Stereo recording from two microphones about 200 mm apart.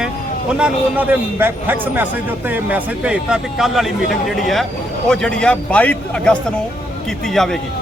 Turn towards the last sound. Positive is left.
turn(degrees=0)  # may be behind; listen again after turning